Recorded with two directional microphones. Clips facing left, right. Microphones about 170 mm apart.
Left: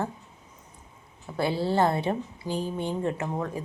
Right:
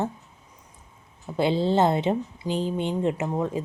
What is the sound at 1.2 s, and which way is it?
Speech, 20° right (ahead or behind).